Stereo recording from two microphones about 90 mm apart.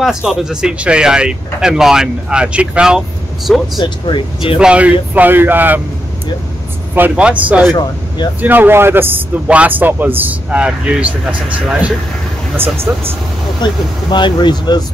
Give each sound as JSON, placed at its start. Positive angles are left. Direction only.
{"t": 0.0, "sound": "speech", "side_deg": -5}
{"t": 3.8, "sound": "speech", "side_deg": 65}
{"t": 4.6, "sound": "a man's voice", "side_deg": -10}
{"t": 7.0, "sound": "a man's voice", "side_deg": -15}
{"t": 12.6, "sound": "a man's voice", "side_deg": -25}
{"t": 14.1, "sound": "speech", "side_deg": 60}